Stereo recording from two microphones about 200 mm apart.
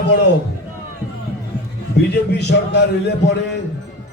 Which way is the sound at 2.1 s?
60° left (ahead or behind).